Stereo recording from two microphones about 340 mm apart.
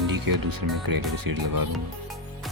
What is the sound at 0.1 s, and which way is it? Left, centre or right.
Speech, right.